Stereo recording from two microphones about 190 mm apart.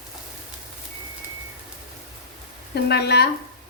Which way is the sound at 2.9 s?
60° left (ahead or behind).